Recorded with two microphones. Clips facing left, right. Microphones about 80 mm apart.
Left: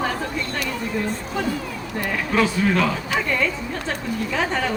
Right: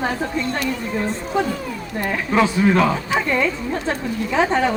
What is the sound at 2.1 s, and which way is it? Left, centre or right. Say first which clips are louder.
Speech: right 3 dB; centre.